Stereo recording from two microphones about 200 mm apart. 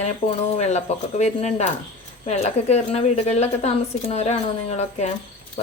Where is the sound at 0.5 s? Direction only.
35° left (ahead or behind).